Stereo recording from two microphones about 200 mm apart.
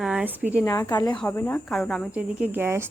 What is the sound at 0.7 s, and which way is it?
Speech, 15° left (ahead or behind).